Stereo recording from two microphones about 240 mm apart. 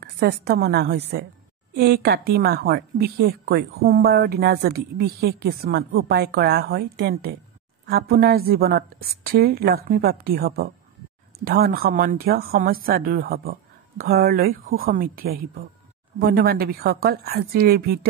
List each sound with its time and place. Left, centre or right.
0.0 s a woman's voice: right